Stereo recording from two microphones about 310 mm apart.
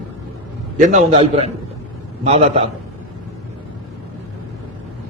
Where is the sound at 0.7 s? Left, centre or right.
Right.